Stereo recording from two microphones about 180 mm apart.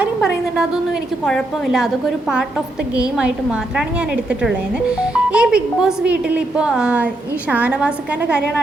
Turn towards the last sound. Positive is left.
turn(degrees=-5)  # may be behind; listen again after turning